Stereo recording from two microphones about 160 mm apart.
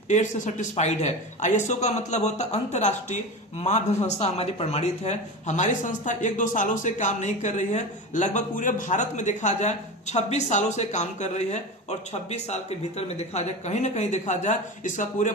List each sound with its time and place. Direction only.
0.1 s speech: 50° left (ahead or behind)